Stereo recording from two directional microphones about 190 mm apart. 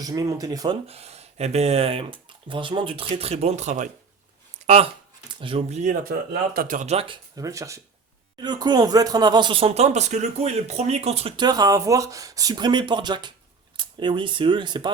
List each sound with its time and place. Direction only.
0.0 s speech: 20° right (ahead or behind)
0.9 s speech: 35° right (ahead or behind)